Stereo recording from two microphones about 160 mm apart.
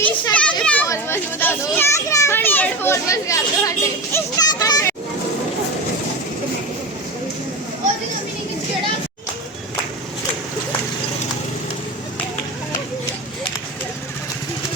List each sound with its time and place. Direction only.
0.0 s children playing: 10° left (ahead or behind)
0.9 s a child's voice: 15° left (ahead or behind)